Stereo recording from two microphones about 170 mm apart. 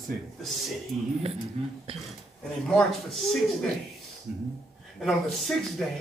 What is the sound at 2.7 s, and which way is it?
Speech, centre (ahead or behind).